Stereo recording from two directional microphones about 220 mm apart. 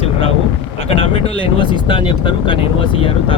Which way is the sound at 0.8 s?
25° left (ahead or behind).